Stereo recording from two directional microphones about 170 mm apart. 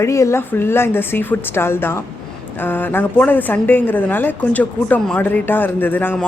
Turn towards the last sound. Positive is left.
turn(degrees=10)  # may be behind; listen again after turning